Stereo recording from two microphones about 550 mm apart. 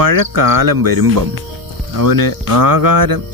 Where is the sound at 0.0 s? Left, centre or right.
Right.